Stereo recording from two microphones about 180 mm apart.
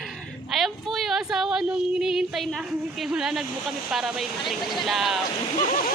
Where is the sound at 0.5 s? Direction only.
Centre (ahead or behind).